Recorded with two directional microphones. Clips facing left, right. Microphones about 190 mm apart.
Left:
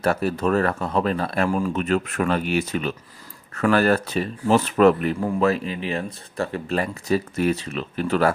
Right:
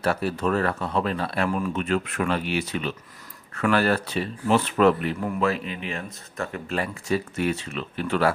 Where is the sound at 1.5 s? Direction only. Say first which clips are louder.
Left 3 dB; 30° left (ahead or behind).